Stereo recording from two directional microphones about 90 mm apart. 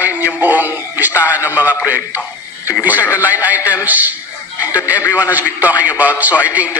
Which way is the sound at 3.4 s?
15° right (ahead or behind).